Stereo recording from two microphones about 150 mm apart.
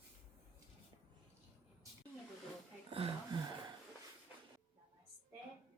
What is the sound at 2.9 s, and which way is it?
Speech, 40° right (ahead or behind).